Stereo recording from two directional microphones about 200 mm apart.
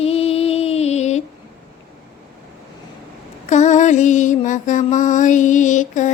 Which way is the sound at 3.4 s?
35° left (ahead or behind).